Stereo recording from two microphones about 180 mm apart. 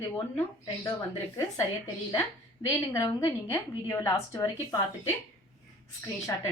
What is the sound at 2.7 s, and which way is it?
A woman's voice, 15° left (ahead or behind).